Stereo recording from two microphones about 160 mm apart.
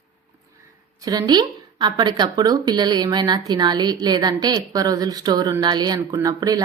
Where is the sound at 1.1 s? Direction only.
25° right (ahead or behind).